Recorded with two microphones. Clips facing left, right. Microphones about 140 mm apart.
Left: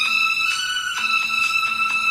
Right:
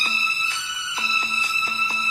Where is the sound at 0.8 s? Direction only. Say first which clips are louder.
Even; 35° right (ahead or behind).